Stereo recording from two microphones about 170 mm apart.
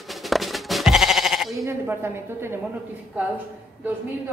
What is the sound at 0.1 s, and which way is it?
Sheep, centre (ahead or behind).